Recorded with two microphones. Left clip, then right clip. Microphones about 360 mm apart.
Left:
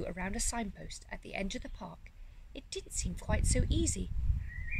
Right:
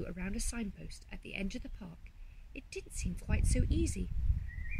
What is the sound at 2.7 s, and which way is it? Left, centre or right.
Speech, centre.